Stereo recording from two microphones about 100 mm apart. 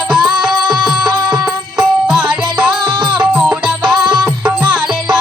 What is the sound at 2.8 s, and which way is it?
Music, 50° right (ahead or behind).